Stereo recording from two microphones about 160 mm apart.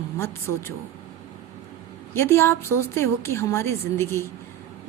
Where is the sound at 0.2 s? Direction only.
15° left (ahead or behind).